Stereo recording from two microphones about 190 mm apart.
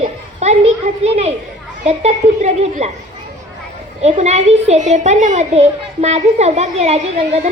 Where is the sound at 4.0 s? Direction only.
35° right (ahead or behind).